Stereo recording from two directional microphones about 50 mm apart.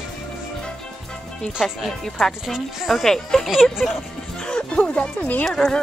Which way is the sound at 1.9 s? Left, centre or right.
Centre.